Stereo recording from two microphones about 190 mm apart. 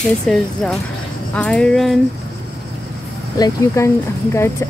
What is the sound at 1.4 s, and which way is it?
Speech, 5° left (ahead or behind).